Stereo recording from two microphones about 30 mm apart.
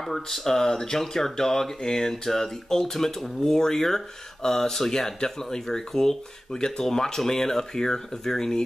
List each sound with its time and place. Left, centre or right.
0.0 s speech: centre